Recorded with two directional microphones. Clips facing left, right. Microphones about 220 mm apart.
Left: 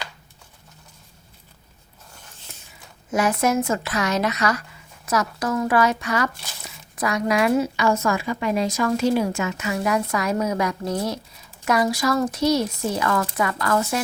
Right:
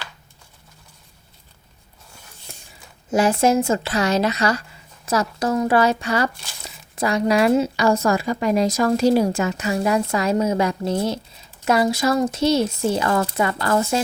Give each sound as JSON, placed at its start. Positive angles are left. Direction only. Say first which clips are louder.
{"t": 3.1, "sound": "a woman's voice", "louder": "right 4 dB", "side_deg": -30}